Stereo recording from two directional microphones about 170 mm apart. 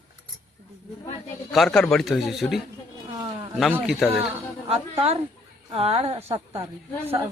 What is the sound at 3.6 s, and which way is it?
Speech, centre (ahead or behind).